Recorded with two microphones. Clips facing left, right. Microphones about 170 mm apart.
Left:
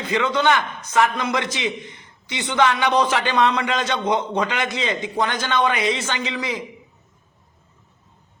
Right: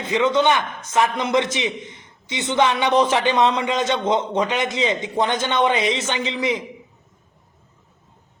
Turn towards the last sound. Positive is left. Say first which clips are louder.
# right 3 dB
turn(degrees=-25)  # may be behind; listen again after turning